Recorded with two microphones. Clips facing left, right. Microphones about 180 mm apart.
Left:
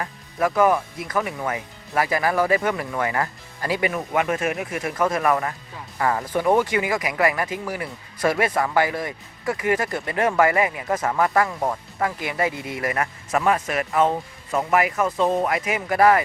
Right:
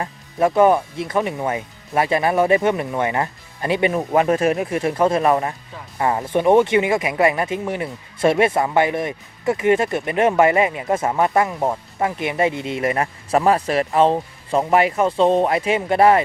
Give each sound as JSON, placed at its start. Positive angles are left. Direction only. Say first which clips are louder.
{"t": 0.0, "sound": "speech", "louder": "right 4 dB", "side_deg": -25}